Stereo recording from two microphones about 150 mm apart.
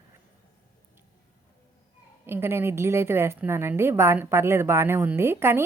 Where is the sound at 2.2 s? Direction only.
15° right (ahead or behind).